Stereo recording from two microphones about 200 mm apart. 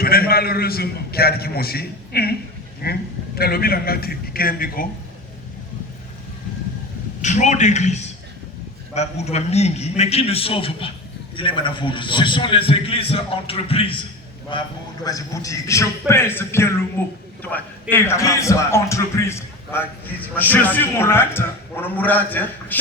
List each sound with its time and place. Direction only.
0.0 s a man's voice: 50° left (ahead or behind)
7.2 s a man's voice: 35° left (ahead or behind)
15.0 s a man's voice: 15° left (ahead or behind)